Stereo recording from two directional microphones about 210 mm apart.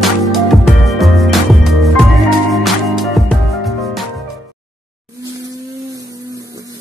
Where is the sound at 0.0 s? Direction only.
Centre (ahead or behind).